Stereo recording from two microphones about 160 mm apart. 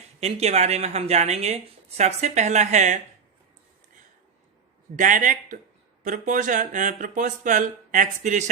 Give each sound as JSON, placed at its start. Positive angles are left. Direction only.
{"t": 0.2, "sound": "speech", "side_deg": -40}
{"t": 4.9, "sound": "speech", "side_deg": -55}